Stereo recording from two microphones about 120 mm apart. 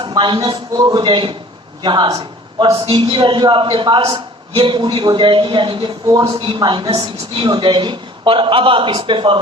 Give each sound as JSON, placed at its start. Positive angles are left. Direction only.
{"t": 0.0, "sound": "a woman's voice", "side_deg": -40}
{"t": 2.7, "sound": "a woman's voice", "side_deg": -45}